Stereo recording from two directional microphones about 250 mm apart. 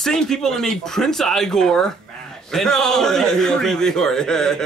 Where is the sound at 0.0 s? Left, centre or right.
Centre.